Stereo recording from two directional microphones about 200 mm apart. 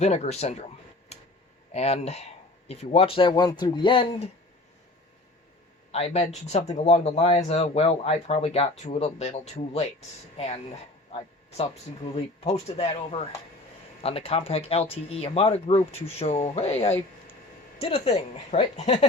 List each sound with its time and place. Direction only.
0.0 s speech: 35° left (ahead or behind)
1.1 s tick-tock: 30° left (ahead or behind)
1.7 s speech: 30° left (ahead or behind)
5.9 s speech: 30° left (ahead or behind)